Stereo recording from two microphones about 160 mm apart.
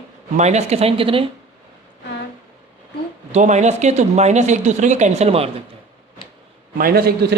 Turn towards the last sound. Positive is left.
turn(degrees=-80)